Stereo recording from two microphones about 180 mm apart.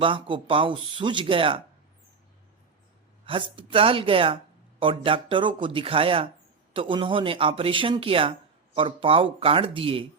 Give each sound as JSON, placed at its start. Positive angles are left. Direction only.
{"t": 0.0, "sound": "speech", "side_deg": -30}
{"t": 3.2, "sound": "speech", "side_deg": -30}